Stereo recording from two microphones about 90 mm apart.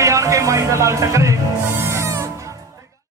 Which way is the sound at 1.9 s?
30° right (ahead or behind).